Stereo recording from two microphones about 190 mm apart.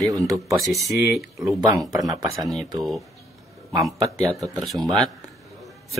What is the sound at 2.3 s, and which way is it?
Speech, centre (ahead or behind).